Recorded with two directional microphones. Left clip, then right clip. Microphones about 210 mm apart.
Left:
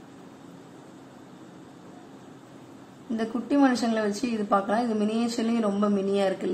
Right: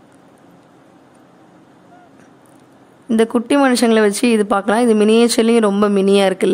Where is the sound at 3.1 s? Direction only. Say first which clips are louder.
Right 13 dB; 50° right (ahead or behind).